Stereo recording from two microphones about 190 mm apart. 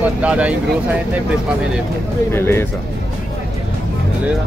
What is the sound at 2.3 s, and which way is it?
Speech, 10° left (ahead or behind).